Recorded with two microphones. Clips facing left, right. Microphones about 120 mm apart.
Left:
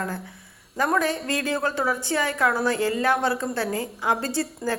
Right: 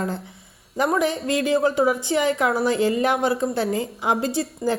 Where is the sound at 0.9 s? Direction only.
15° right (ahead or behind).